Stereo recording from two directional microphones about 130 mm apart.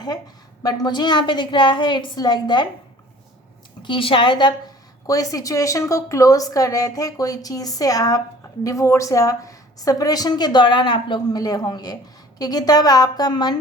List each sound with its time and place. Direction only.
0.6 s a woman's voice: 30° left (ahead or behind)
3.8 s a woman's voice: 45° left (ahead or behind)